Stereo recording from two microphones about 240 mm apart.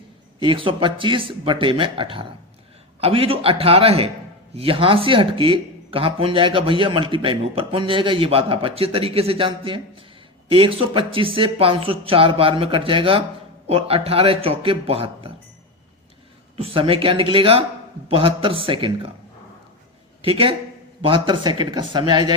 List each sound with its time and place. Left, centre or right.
0.3 s speech: right
16.6 s speech: right
20.2 s speech: right